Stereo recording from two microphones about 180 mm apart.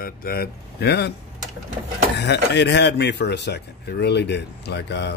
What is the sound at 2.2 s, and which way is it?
Speech, 70° left (ahead or behind).